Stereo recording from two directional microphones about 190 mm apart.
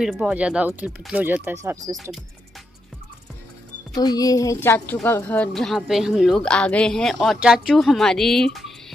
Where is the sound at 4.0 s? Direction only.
20° left (ahead or behind).